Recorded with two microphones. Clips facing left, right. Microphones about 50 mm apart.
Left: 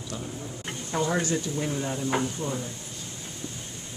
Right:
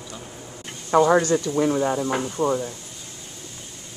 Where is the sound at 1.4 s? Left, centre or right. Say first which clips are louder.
Right 9 dB; right.